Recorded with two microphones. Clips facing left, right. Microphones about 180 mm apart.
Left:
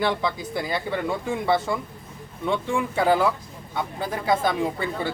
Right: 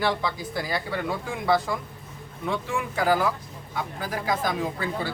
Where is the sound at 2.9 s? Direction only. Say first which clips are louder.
Left 2 dB; 25° left (ahead or behind).